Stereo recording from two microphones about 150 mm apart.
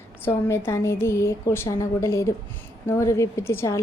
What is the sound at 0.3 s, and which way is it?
A woman's voice, 15° left (ahead or behind).